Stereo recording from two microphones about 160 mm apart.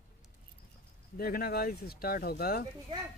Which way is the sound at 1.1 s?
65° left (ahead or behind).